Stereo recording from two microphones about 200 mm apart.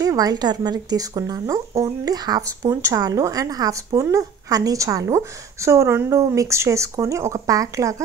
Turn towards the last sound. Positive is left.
turn(degrees=-15)  # may be behind; listen again after turning